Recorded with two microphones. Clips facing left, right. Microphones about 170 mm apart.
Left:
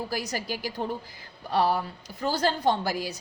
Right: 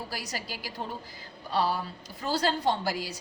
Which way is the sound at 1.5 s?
55° left (ahead or behind).